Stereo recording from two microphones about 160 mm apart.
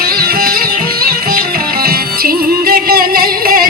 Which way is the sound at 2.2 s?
70° right (ahead or behind).